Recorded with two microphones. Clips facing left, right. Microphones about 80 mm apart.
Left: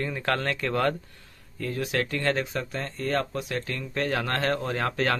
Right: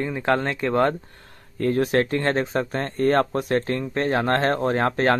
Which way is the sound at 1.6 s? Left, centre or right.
Right.